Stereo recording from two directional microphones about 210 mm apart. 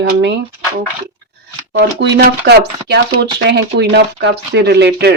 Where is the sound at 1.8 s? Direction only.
55° right (ahead or behind).